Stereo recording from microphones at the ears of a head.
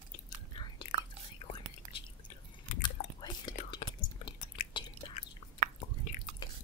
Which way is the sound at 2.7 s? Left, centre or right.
Left.